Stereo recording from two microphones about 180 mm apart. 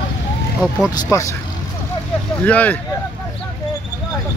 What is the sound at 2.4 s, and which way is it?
Speech, 10° left (ahead or behind).